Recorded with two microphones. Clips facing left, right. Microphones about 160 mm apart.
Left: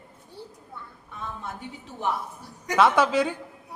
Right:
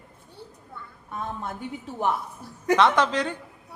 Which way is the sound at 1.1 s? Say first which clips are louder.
Right 4 dB; 50° right (ahead or behind).